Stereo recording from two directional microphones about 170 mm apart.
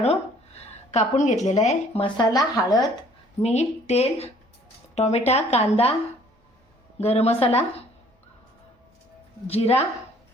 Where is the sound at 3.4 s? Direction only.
40° left (ahead or behind).